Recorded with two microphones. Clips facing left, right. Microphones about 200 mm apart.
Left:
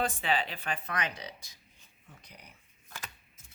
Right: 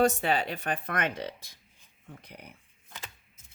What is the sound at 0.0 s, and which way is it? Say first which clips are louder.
Speech: right 6 dB; 45° right (ahead or behind).